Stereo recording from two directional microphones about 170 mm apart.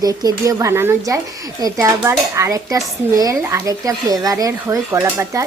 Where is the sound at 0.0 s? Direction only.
20° right (ahead or behind).